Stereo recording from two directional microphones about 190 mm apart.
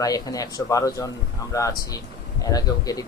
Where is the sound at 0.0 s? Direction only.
20° left (ahead or behind).